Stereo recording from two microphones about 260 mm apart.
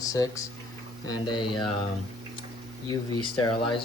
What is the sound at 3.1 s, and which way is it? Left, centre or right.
Speech, centre.